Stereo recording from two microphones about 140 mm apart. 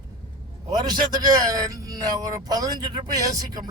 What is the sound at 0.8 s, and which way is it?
Speech, 30° right (ahead or behind).